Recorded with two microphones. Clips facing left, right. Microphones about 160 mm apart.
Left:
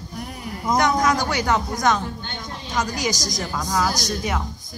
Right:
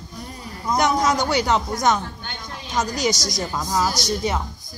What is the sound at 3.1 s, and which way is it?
Speech, 90° right.